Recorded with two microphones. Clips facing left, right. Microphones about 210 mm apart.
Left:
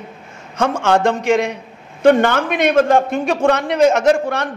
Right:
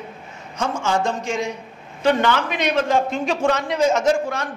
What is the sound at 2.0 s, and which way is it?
A man's voice, 50° left (ahead or behind).